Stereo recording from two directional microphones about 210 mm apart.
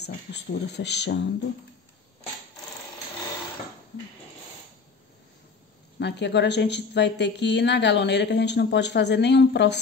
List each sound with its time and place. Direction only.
0.0 s speech: 55° left (ahead or behind)
5.9 s a woman's voice: 55° left (ahead or behind)